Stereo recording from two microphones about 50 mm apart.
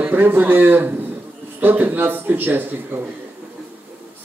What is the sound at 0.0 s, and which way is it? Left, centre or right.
A man's voice, right.